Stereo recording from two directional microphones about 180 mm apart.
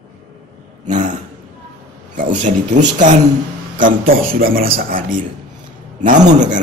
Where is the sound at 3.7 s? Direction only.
50° right (ahead or behind).